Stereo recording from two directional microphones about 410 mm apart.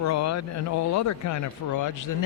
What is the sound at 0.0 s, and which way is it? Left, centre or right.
Speech, left.